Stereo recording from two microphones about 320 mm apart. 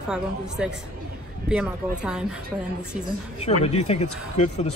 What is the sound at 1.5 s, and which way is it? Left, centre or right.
Speech, centre.